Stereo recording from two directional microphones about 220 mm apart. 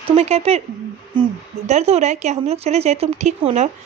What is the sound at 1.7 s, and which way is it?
Speech, 30° right (ahead or behind).